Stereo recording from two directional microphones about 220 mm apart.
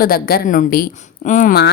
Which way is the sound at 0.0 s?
40° left (ahead or behind).